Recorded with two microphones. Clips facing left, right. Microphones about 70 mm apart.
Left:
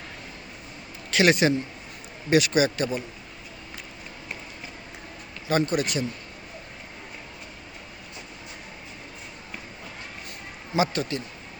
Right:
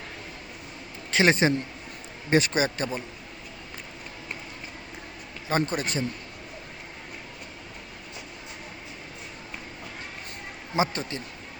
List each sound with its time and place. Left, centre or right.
1.1 s a man's voice: right
5.5 s speech: right
10.8 s speech: right